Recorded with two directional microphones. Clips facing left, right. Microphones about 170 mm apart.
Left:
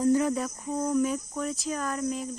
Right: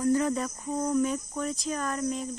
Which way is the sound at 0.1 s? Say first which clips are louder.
Left 1 dB; 10° left (ahead or behind).